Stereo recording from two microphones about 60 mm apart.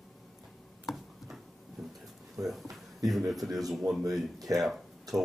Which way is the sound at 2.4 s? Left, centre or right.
Centre.